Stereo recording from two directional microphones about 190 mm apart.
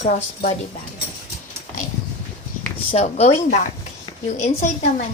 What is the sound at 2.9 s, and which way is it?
A woman's voice, 35° left (ahead or behind).